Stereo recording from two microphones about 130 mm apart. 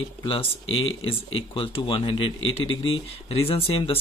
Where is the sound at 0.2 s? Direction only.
45° left (ahead or behind).